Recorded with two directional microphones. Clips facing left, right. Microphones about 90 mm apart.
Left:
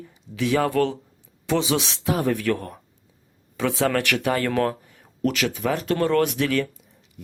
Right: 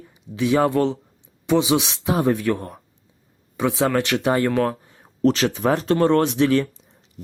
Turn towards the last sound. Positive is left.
turn(degrees=-25)  # may be behind; listen again after turning